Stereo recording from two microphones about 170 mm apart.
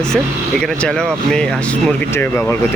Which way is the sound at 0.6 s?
5° left (ahead or behind).